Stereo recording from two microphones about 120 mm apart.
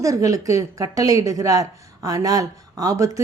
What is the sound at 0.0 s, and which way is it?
A woman's voice, 30° right (ahead or behind).